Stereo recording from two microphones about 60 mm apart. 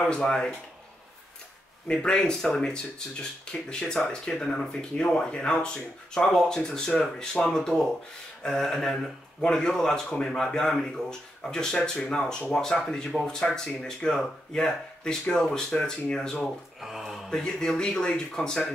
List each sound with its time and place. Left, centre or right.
0.1 s speech: centre
1.9 s speech: centre
16.8 s a sound: centre
17.3 s speech: centre